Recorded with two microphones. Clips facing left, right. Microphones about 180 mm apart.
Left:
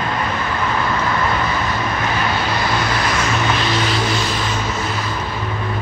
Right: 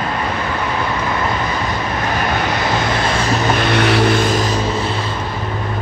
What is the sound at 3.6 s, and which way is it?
Vehicle, 60° right (ahead or behind).